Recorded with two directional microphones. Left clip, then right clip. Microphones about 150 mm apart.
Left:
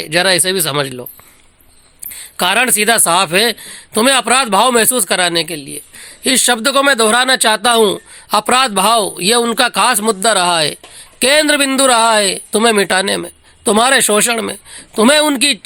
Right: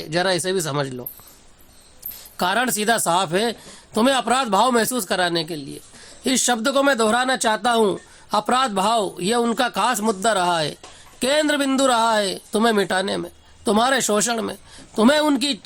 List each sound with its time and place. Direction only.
0.0 s speech: 25° left (ahead or behind)
2.4 s speech: 20° left (ahead or behind)